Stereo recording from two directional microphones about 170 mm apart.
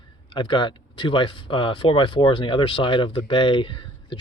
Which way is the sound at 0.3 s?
30° left (ahead or behind).